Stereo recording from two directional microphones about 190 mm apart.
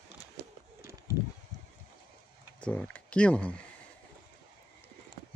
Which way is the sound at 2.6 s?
5° left (ahead or behind).